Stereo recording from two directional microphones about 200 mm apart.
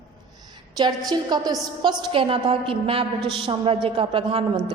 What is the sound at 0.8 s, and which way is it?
A woman's voice, 20° right (ahead or behind).